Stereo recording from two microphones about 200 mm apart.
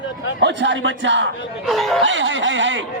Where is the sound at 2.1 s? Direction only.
65° right (ahead or behind).